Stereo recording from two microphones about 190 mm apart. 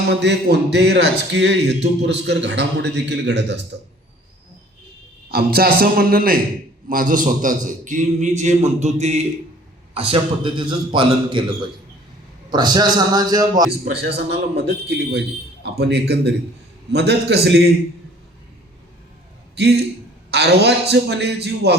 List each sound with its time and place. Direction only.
0.1 s a man's voice: 65° right (ahead or behind)
5.3 s a man's voice: 55° right (ahead or behind); by 13.7 s 20° right (ahead or behind)
13.7 s a man's voice: 60° right (ahead or behind)
19.5 s a man's voice: 60° right (ahead or behind)